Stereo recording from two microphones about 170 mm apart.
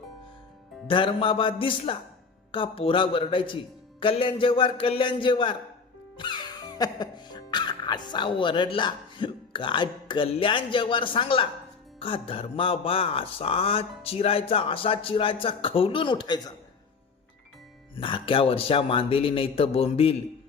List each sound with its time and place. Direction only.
0.9 s speech: 30° left (ahead or behind)
17.9 s speech: 30° left (ahead or behind)